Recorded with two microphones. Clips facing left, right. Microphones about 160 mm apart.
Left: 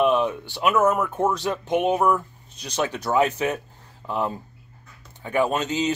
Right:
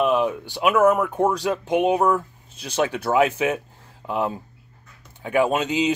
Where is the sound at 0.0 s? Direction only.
5° right (ahead or behind).